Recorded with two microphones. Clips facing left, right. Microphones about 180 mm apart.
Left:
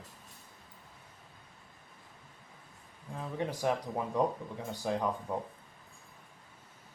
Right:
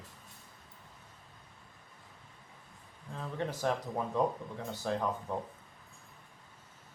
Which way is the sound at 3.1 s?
10° left (ahead or behind).